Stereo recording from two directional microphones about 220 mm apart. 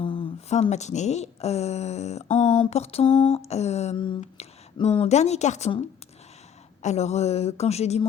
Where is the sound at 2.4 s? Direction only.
30° left (ahead or behind).